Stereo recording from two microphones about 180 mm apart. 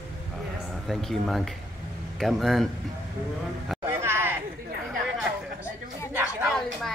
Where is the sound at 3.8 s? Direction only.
15° right (ahead or behind).